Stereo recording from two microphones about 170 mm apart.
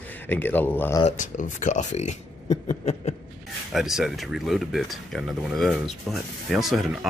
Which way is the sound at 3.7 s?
Centre (ahead or behind).